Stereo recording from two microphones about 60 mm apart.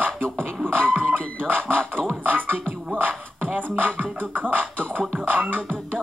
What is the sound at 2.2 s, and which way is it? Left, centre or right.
Music, right.